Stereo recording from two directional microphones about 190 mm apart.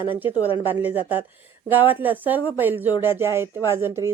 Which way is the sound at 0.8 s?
10° right (ahead or behind).